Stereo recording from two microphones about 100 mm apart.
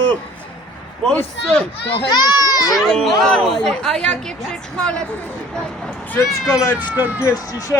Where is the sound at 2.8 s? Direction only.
Centre (ahead or behind).